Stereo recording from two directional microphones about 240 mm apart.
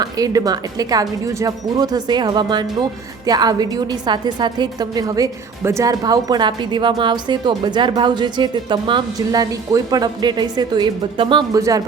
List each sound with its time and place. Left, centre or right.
0.0 s a woman's voice: centre